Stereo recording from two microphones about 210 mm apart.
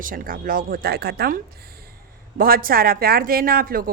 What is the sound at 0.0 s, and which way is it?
Speech, 40° right (ahead or behind).